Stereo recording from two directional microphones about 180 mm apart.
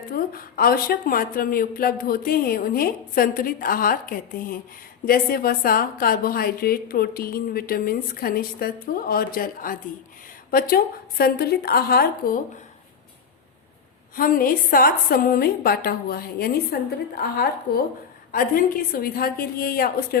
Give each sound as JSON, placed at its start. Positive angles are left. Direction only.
{"t": 0.1, "sound": "a woman's voice", "side_deg": 55}
{"t": 14.2, "sound": "a woman's voice", "side_deg": 50}